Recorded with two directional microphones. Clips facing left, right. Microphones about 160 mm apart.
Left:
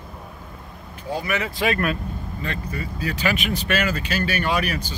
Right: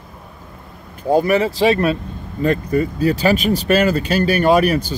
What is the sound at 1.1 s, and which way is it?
Speech, 50° right (ahead or behind).